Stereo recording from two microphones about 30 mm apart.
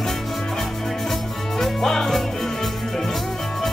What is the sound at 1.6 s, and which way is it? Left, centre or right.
Music, centre.